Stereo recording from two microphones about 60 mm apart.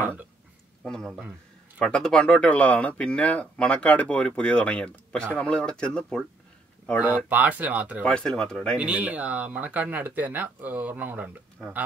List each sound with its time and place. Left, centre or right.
0.0 s speech: right
0.8 s speech: centre
7.0 s speech: right
8.0 s speech: centre
8.4 s speech: centre
8.7 s speech: right